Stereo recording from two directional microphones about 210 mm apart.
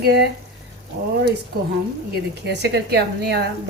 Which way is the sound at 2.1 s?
55° right (ahead or behind).